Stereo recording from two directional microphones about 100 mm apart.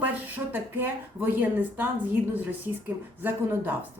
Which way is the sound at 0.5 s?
20° right (ahead or behind).